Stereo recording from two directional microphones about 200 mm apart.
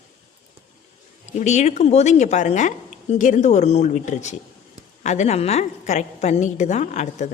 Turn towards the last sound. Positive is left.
turn(degrees=35)  # may be behind; listen again after turning